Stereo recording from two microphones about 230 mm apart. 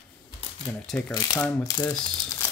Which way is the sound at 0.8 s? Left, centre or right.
Centre.